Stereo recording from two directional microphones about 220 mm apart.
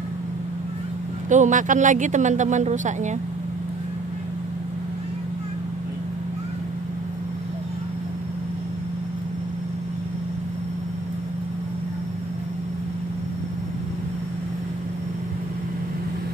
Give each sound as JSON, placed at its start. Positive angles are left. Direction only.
{"t": 1.3, "sound": "speech", "side_deg": -35}